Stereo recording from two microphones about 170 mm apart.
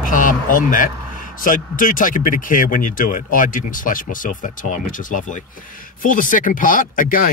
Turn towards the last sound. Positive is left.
turn(degrees=55)  # may be behind; listen again after turning